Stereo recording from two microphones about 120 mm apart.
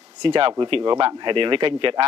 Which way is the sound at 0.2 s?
45° right (ahead or behind).